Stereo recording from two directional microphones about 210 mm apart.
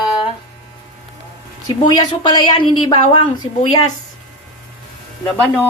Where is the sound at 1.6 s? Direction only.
20° left (ahead or behind).